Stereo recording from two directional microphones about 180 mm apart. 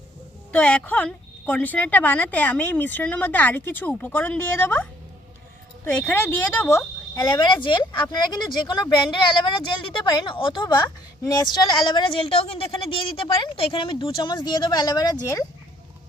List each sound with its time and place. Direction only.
0.5 s a woman's voice: 10° left (ahead or behind)